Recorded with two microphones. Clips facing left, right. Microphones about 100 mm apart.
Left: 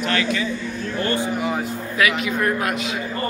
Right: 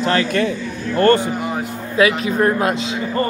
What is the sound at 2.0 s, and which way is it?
Speech, 35° right (ahead or behind).